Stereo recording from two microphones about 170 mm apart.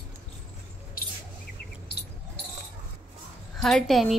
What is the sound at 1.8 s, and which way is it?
Cricket, 75° left (ahead or behind).